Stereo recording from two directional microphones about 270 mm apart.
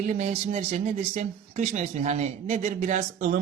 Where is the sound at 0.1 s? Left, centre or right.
Right.